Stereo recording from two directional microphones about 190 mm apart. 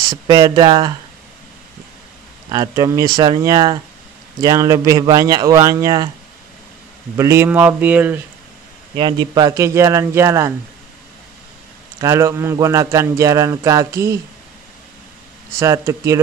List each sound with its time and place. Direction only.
0.1 s speech: 20° right (ahead or behind)
2.5 s speech: 15° right (ahead or behind)
7.2 s speech: 15° right (ahead or behind)
8.9 s speech: 25° right (ahead or behind)
12.0 s speech: 15° right (ahead or behind)
15.6 s speech: 15° right (ahead or behind)